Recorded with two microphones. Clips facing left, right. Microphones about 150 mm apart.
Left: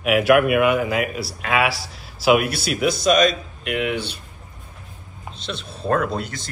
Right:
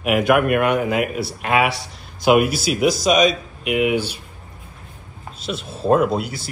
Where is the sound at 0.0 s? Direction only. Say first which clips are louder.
Left 1 dB; centre (ahead or behind).